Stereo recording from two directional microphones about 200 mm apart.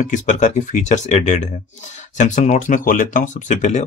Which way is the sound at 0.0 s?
40° left (ahead or behind).